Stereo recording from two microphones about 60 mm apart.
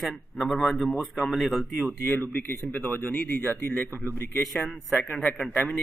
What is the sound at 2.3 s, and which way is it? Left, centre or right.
Speech, left.